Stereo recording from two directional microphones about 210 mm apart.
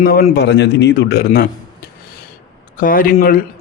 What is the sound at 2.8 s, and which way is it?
Speech, 40° left (ahead or behind).